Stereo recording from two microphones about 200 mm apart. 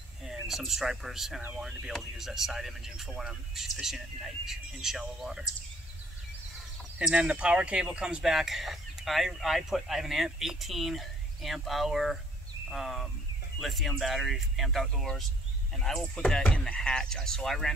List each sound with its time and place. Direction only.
0.2 s speech: centre (ahead or behind)
7.0 s speech: 5° right (ahead or behind)